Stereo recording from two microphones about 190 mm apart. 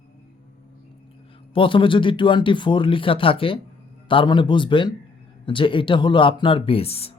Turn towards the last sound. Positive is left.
turn(degrees=30)  # may be behind; listen again after turning